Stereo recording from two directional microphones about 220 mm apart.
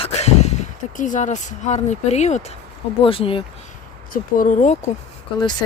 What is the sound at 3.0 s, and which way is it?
Speech, 25° left (ahead or behind).